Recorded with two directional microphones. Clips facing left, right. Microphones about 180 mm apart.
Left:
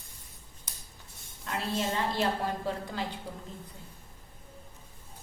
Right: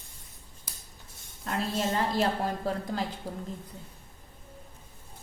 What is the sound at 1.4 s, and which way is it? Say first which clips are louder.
Speech: right 2 dB; 45° right (ahead or behind).